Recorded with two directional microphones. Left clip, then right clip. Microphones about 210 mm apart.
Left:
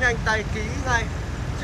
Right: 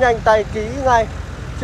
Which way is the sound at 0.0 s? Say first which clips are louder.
Right 9 dB; 5° right (ahead or behind).